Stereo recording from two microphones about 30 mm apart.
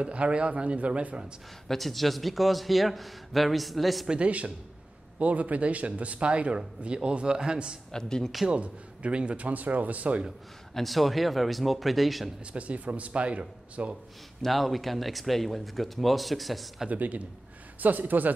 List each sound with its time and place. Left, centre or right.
0.0 s a man's voice: right
1.7 s a man's voice: centre
4.2 s speech: right
7.9 s speech: centre
8.5 s a man's voice: right
9.4 s speech: right
10.7 s a man's voice: centre
12.5 s speech: right
14.4 s a man's voice: centre
16.9 s speech: right
17.7 s speech: right